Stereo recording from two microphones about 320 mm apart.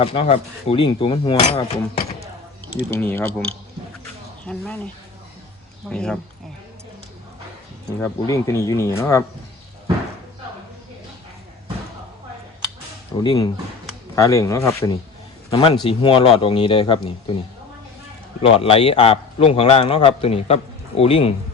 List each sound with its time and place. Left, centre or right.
0.0 s a man's voice: centre
3.0 s speech: centre
5.9 s speech: centre
8.0 s a man's voice: centre
13.1 s a man's voice: centre
18.4 s a man's voice: centre